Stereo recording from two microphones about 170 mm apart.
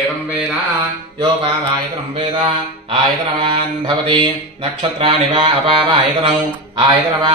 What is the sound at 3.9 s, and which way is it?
Speech, 25° right (ahead or behind).